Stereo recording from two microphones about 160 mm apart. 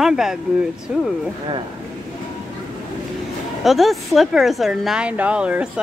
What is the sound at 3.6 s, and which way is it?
Speech, centre (ahead or behind).